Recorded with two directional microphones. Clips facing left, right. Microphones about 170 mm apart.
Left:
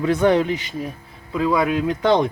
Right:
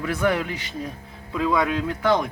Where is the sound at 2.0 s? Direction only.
25° left (ahead or behind).